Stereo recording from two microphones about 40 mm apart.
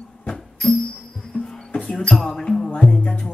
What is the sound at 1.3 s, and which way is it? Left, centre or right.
Music, left.